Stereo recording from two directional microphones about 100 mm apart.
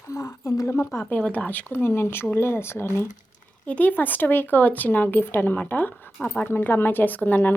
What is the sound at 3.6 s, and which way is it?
Speech, 15° left (ahead or behind).